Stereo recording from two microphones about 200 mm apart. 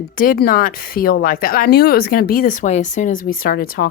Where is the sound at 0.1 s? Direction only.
45° left (ahead or behind).